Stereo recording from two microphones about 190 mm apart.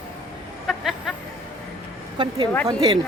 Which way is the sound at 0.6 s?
Centre (ahead or behind).